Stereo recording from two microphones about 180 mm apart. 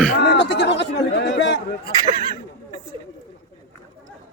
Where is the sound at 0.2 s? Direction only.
75° left (ahead or behind).